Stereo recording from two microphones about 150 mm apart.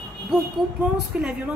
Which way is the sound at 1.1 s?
5° right (ahead or behind).